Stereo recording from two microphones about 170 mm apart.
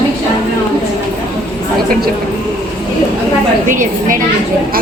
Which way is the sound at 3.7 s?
50° right (ahead or behind).